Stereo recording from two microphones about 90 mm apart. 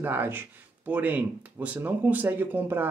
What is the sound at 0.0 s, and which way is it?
Speech, 25° right (ahead or behind).